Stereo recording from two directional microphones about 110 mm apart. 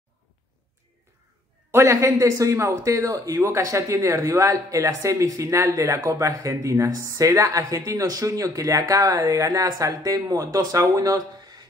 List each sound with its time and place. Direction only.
1.7 s speech: 25° right (ahead or behind)